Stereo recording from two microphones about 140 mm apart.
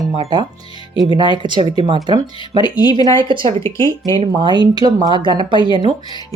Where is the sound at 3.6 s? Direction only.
25° left (ahead or behind).